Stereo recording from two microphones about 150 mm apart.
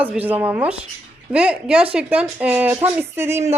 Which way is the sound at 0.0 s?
10° right (ahead or behind).